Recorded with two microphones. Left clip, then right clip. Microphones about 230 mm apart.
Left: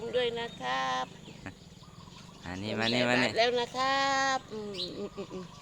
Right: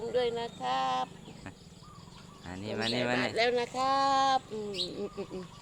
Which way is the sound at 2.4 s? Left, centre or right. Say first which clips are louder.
Left 2 dB; centre.